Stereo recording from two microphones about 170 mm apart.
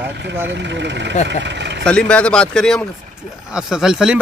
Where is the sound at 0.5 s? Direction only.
90° right.